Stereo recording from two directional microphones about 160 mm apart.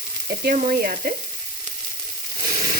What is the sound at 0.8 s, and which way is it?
Frying, 60° right (ahead or behind).